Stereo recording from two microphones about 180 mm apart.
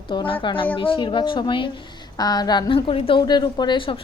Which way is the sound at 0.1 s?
30° left (ahead or behind).